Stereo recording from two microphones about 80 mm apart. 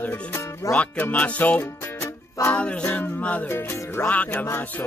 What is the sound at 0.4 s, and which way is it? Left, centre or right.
Music, left.